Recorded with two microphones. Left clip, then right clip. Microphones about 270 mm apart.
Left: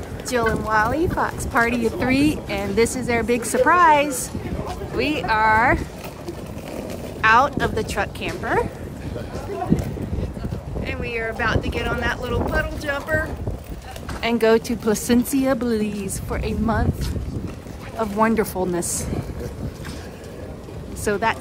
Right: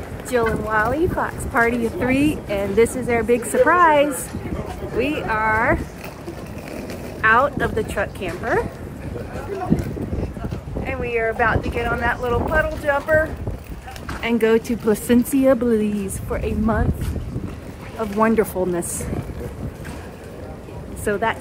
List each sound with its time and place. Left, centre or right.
0.3 s a woman's voice: centre
7.2 s a woman's voice: centre
10.8 s a woman's voice: centre
14.2 s a woman's voice: centre
18.2 s a woman's voice: centre
21.0 s speech: centre